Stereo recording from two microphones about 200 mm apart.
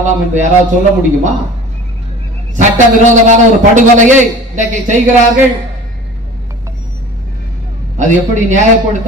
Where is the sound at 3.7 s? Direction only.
35° right (ahead or behind).